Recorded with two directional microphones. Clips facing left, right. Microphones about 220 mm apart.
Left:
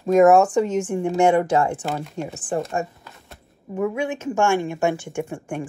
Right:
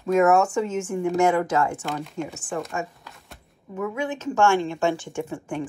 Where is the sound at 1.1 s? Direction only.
30° left (ahead or behind).